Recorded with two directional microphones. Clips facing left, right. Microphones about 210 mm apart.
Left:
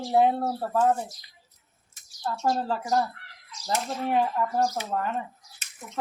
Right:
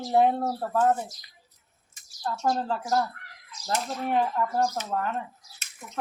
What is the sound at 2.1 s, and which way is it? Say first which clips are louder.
Speech: even; centre (ahead or behind).